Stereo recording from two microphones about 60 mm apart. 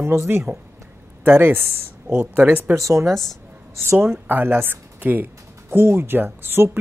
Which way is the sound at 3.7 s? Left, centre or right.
Right.